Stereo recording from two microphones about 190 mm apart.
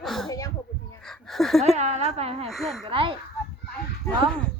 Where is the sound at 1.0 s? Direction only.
Centre (ahead or behind).